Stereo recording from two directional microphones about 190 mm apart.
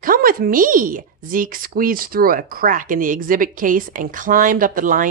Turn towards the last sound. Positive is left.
turn(degrees=-45)  # may be behind; listen again after turning